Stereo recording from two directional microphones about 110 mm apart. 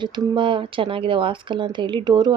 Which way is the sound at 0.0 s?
45° right (ahead or behind).